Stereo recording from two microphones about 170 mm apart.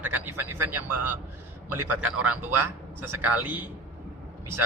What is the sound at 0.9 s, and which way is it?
A man's voice, 10° right (ahead or behind).